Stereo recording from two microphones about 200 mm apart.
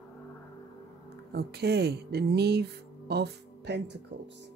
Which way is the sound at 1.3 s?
55° right (ahead or behind).